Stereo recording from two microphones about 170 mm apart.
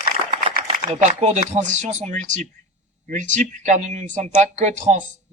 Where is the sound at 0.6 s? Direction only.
40° right (ahead or behind).